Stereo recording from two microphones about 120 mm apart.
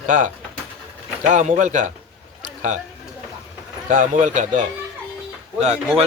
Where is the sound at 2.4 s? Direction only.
90° right.